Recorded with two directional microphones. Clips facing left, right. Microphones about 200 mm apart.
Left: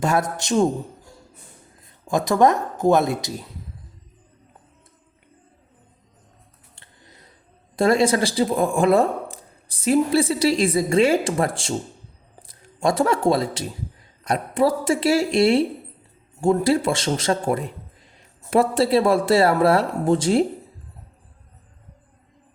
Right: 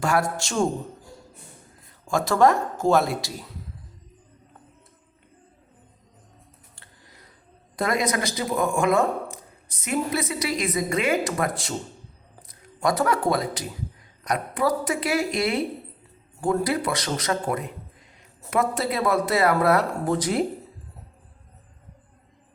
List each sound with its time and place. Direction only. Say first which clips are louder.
0.0 s speech: left 2 dB; 20° left (ahead or behind)
2.0 s speech: left 2 dB; 20° left (ahead or behind)
6.7 s a sound: left 4 dB; 25° left (ahead or behind)
7.8 s speech: left 7 dB; 30° left (ahead or behind)